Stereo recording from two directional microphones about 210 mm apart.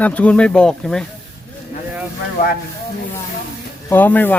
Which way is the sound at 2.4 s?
40° left (ahead or behind).